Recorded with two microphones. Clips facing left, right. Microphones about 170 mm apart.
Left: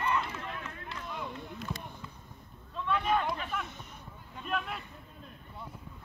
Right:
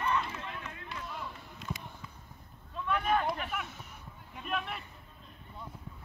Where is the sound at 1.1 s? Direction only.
5° right (ahead or behind).